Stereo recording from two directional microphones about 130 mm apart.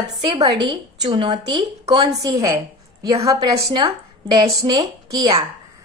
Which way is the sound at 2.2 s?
25° right (ahead or behind).